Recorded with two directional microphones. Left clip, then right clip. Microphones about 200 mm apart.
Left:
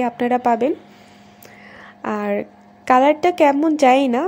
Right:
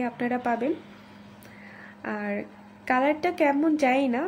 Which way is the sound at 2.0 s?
35° left (ahead or behind).